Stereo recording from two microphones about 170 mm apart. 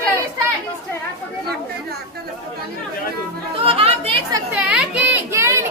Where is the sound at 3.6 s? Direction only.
35° right (ahead or behind).